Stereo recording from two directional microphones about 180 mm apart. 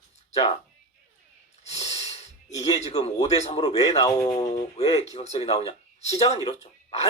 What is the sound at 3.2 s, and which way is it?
Speech, 30° left (ahead or behind).